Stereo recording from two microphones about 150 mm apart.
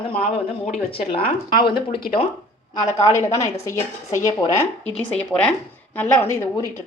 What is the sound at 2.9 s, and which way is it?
Speech, 20° left (ahead or behind).